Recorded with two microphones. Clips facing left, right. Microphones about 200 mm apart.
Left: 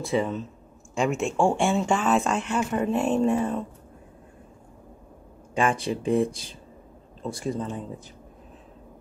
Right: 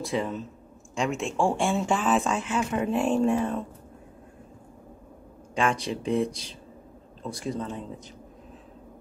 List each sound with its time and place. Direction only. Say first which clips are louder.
0.0 s speech: left 3 dB; centre (ahead or behind)
5.5 s speech: left 2 dB; 5° left (ahead or behind)
6.0 s speech: left 3 dB; 50° left (ahead or behind)
7.4 s speech: left 2 dB; centre (ahead or behind)